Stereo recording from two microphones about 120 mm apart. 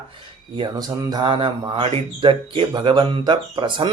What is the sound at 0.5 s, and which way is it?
Speech, 40° right (ahead or behind).